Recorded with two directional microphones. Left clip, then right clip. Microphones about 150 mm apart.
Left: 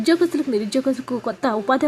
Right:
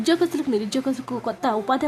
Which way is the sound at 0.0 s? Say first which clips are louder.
Left 3 dB; 15° left (ahead or behind).